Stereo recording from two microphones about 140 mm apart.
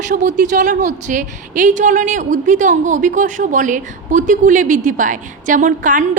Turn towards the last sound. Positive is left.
turn(degrees=-65)  # may be behind; listen again after turning